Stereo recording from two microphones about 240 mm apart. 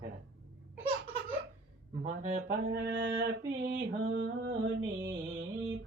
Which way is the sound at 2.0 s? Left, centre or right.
Right.